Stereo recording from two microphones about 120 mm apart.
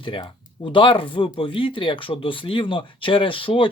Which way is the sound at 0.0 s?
45° left (ahead or behind).